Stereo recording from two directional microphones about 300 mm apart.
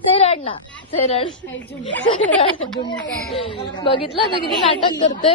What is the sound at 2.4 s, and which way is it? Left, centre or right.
Speech, centre.